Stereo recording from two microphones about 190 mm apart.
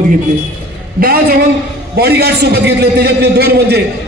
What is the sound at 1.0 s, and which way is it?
A man's voice, 55° right (ahead or behind).